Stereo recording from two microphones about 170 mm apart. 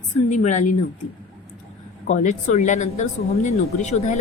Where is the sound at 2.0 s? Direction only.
45° left (ahead or behind).